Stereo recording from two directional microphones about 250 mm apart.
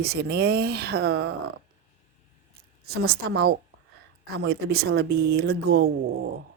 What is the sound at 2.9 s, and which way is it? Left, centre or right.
A woman's voice, right.